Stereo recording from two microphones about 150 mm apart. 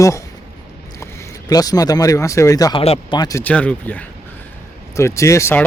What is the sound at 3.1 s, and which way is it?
Speech, 25° left (ahead or behind).